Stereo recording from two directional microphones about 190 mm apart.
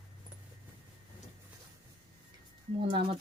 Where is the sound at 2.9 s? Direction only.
25° right (ahead or behind).